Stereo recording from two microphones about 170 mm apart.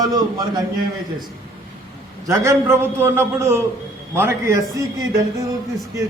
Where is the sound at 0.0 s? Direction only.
25° right (ahead or behind).